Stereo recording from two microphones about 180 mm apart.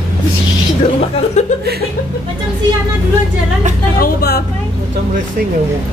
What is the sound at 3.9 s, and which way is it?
Vehicle, 60° left (ahead or behind).